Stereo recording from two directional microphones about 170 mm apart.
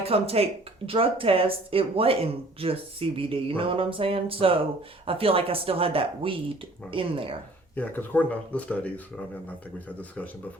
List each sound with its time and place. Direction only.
0.0 s speech: 35° right (ahead or behind)
7.8 s speech: 10° left (ahead or behind)